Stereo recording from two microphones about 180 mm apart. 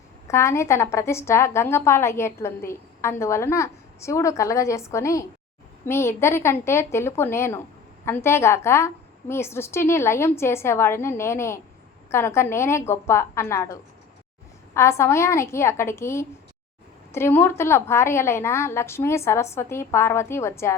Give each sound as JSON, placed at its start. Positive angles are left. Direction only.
{"t": 0.3, "sound": "a woman's voice", "side_deg": 15}